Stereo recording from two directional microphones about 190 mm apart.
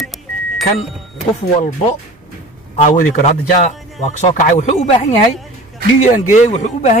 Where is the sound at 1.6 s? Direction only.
35° left (ahead or behind).